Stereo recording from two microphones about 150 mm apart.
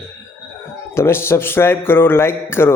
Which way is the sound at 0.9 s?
15° left (ahead or behind).